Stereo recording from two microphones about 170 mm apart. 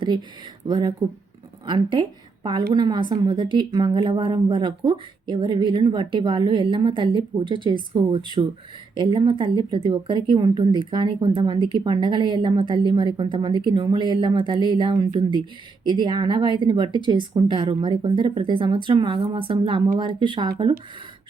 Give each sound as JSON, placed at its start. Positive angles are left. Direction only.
{"t": 0.0, "sound": "speech", "side_deg": -25}